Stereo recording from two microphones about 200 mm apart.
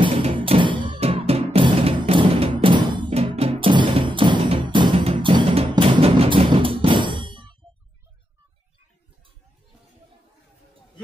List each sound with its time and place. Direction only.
0.0 s music: 25° right (ahead or behind)